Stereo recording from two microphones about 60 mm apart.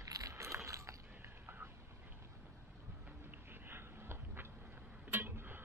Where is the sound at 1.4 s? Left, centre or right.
Right.